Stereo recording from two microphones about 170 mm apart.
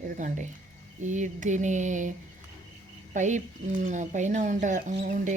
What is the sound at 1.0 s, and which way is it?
Speech, 45° right (ahead or behind).